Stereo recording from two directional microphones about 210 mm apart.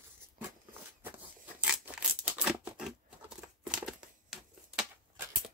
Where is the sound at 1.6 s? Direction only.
5° right (ahead or behind).